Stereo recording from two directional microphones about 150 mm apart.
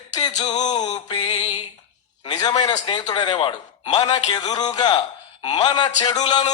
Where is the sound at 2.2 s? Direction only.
25° left (ahead or behind).